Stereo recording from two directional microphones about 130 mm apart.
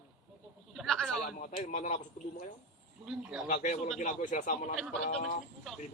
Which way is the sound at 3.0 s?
5° right (ahead or behind).